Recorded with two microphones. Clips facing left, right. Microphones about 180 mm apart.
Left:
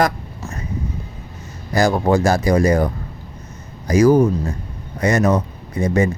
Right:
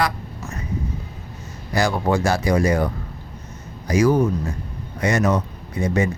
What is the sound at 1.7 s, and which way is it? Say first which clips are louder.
Speech: left 4 dB; 40° left (ahead or behind).